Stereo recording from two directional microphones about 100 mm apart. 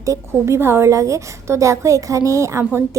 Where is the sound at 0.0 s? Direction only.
30° right (ahead or behind).